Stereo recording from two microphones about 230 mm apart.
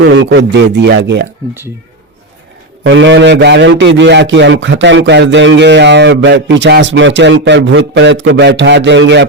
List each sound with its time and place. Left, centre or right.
0.0 s a man's voice: right
2.8 s a man's voice: right